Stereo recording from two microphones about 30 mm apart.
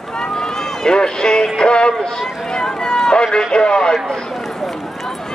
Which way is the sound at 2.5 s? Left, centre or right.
Left.